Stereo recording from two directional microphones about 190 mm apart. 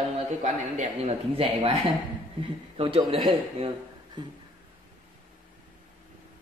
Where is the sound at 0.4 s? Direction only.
35° right (ahead or behind).